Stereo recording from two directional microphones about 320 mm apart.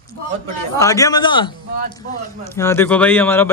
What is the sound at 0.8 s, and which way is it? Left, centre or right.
Speech, centre.